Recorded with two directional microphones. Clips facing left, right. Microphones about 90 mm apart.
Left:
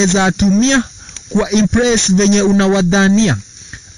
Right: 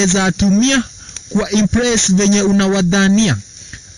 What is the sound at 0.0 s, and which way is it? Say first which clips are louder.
Speech: left 2 dB; 40° left (ahead or behind).